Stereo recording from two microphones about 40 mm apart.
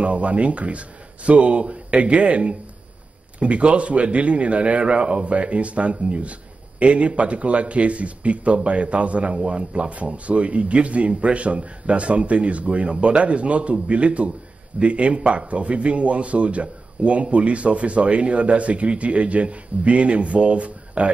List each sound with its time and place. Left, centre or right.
0.0 s speech: right